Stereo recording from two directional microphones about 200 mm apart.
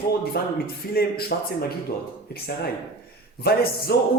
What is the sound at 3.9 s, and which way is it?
Speech, 55° left (ahead or behind).